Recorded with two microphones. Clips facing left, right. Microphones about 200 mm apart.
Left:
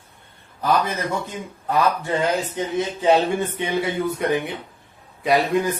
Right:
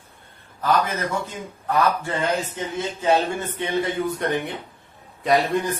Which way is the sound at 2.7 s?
15° left (ahead or behind).